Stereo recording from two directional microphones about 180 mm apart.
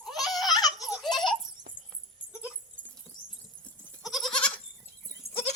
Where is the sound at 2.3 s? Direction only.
10° right (ahead or behind).